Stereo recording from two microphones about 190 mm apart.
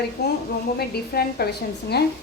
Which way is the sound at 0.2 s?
60° left (ahead or behind).